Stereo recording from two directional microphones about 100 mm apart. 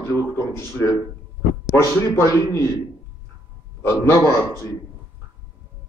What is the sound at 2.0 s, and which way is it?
Speech, 25° left (ahead or behind).